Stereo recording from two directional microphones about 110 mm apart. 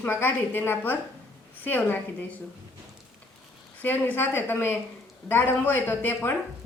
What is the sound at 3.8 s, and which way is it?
A woman's voice, 15° left (ahead or behind).